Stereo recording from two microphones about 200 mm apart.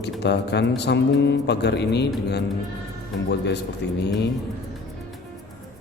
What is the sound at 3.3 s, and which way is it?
Speech, 55° left (ahead or behind).